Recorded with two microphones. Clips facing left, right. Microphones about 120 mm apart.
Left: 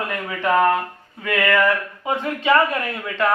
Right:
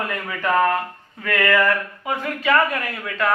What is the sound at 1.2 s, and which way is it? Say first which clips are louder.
Speech: left 1 dB; 15° left (ahead or behind).